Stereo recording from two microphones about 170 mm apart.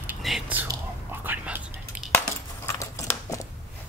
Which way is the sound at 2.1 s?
15° left (ahead or behind).